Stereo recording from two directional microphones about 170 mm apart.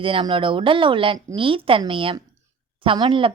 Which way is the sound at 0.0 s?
30° right (ahead or behind).